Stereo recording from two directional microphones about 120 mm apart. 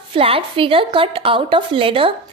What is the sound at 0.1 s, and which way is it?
A woman's voice, 50° right (ahead or behind).